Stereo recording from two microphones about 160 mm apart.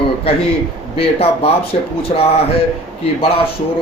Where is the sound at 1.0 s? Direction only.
40° left (ahead or behind).